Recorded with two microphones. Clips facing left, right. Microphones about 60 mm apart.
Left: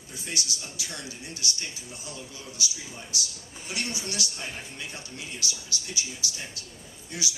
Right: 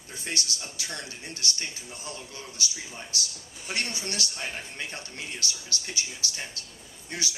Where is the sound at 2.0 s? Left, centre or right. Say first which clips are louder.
Right 1 dB; right.